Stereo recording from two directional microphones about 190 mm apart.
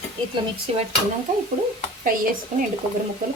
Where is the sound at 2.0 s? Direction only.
45° right (ahead or behind).